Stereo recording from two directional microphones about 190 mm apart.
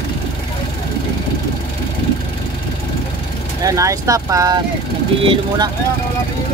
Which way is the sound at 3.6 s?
15° right (ahead or behind).